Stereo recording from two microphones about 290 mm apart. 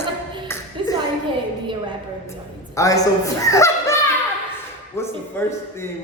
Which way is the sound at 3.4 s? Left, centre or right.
Centre.